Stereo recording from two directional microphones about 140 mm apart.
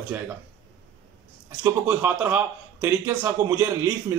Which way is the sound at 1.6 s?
15° right (ahead or behind).